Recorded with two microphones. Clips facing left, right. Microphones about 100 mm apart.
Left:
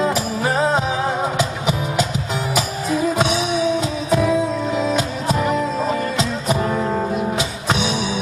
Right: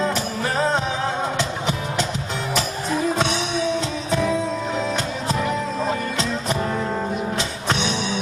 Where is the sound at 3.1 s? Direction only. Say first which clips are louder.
Left 3 dB; 10° left (ahead or behind).